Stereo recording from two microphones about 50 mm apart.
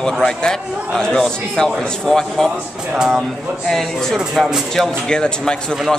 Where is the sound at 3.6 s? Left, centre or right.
Centre.